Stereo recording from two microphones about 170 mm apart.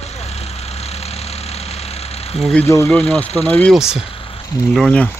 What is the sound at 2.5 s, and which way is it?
Speech, 15° left (ahead or behind).